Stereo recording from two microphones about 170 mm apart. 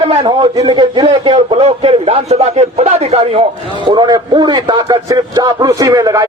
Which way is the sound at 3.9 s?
25° right (ahead or behind).